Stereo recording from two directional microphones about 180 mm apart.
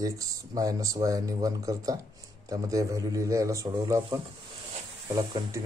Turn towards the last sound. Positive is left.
turn(degrees=-20)  # may be behind; listen again after turning